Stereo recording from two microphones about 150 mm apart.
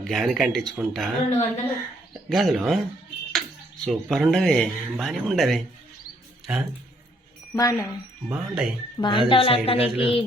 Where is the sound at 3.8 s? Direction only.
Centre (ahead or behind).